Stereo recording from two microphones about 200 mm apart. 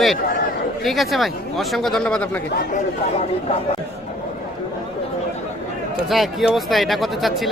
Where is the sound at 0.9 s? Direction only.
Centre (ahead or behind).